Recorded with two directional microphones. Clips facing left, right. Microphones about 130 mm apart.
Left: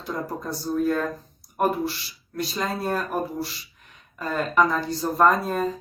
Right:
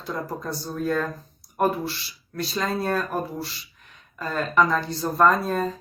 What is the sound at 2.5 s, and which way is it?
Speech, 10° left (ahead or behind).